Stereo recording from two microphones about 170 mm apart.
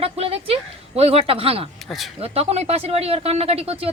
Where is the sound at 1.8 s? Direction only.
Centre (ahead or behind).